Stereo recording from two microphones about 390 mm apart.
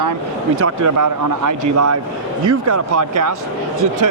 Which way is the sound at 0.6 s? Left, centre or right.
Right.